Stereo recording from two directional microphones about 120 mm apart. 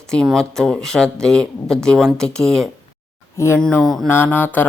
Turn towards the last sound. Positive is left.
turn(degrees=15)  # may be behind; listen again after turning